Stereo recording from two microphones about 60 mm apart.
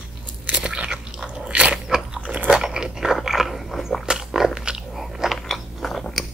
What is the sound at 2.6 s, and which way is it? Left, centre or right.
Biting, centre.